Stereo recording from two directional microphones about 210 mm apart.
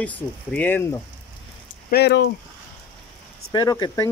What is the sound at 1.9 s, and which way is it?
Speech, 50° left (ahead or behind).